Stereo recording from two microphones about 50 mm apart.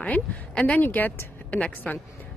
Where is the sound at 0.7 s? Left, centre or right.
Left.